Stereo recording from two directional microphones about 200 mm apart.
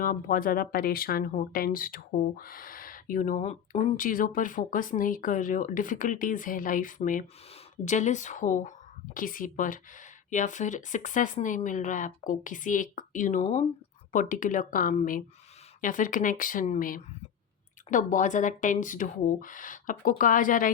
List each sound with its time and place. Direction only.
0.0 s speech: 45° left (ahead or behind)